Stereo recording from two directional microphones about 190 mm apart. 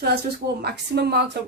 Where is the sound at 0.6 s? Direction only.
55° right (ahead or behind).